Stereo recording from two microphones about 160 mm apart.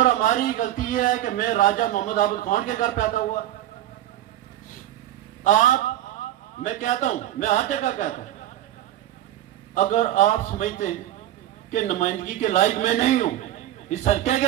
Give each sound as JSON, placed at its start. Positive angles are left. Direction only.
{"t": 0.0, "sound": "a man's voice", "side_deg": 55}
{"t": 5.4, "sound": "a man's voice", "side_deg": 50}
{"t": 9.8, "sound": "a man's voice", "side_deg": 50}